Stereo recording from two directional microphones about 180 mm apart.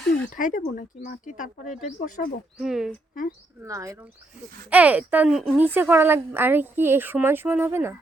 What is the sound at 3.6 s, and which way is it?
A woman's voice, 15° right (ahead or behind).